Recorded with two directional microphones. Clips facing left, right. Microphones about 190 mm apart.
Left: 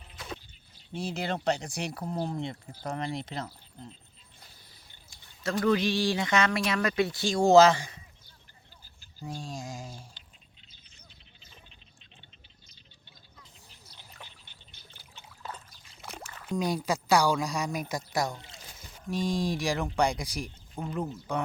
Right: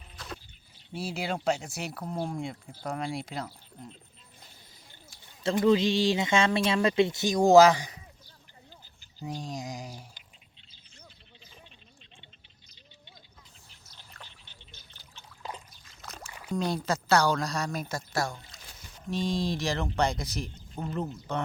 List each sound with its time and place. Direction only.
0.9 s speech: 10° right (ahead or behind)
5.4 s speech: 25° right (ahead or behind)
9.1 s speech: 20° right (ahead or behind)
14.1 s a sound: 10° left (ahead or behind)
16.5 s speech: 10° left (ahead or behind)
19.1 s speech: 10° left (ahead or behind)
20.8 s speech: 5° right (ahead or behind)
21.3 s speech: 10° left (ahead or behind)